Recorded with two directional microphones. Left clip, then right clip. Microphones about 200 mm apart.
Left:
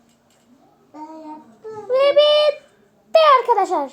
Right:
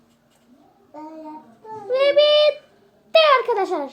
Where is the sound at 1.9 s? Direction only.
10° right (ahead or behind).